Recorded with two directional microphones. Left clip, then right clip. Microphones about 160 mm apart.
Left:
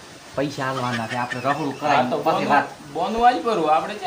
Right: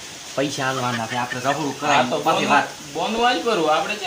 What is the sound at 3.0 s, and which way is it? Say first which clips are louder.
Speech: left 2 dB; centre (ahead or behind).